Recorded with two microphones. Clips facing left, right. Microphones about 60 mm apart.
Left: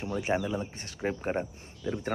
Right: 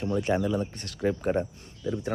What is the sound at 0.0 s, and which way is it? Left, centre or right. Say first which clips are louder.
Speech: right 4 dB; centre.